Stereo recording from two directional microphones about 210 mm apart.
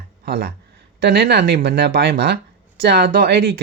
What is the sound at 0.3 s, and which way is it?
Speech, 50° right (ahead or behind).